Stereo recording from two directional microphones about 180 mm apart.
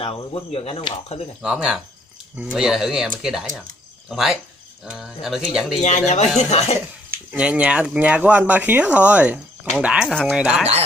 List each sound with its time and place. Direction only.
0.0 s speech: 30° left (ahead or behind)
1.4 s speech: 5° right (ahead or behind)
5.8 s speech: 40° left (ahead or behind)
7.3 s speech: 10° right (ahead or behind)